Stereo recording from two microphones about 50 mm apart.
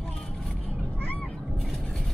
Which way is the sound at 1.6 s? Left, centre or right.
Centre.